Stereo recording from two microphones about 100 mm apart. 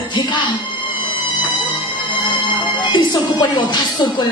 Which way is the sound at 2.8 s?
45° left (ahead or behind).